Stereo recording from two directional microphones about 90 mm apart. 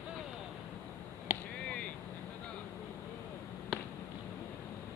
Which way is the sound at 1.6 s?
10° left (ahead or behind).